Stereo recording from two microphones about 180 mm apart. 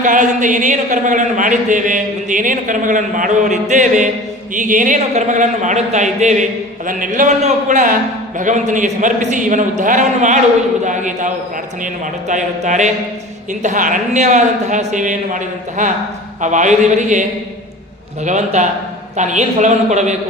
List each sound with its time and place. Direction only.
0.0 s a man's voice: 45° right (ahead or behind)
12.3 s speech: 45° right (ahead or behind)
18.3 s a man's voice: 40° right (ahead or behind)